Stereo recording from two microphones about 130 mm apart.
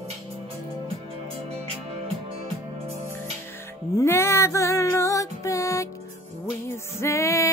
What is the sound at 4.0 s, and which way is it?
Music, 20° left (ahead or behind).